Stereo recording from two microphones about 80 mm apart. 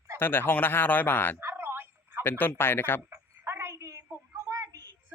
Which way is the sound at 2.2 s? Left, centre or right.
Left.